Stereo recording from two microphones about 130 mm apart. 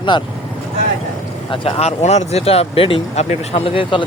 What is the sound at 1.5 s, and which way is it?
Speech, 45° left (ahead or behind).